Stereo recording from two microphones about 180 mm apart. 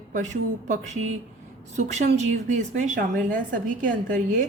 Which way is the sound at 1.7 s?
40° right (ahead or behind).